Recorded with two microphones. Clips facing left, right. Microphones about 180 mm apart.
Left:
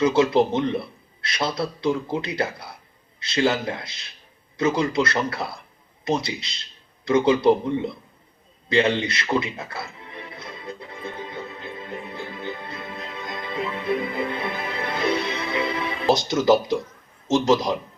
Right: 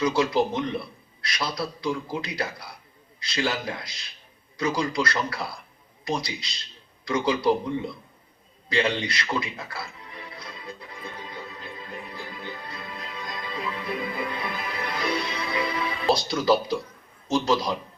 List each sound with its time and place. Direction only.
0.0 s a man's voice: 25° left (ahead or behind)
8.7 s music: 25° left (ahead or behind)
17.2 s a man's voice: 20° left (ahead or behind)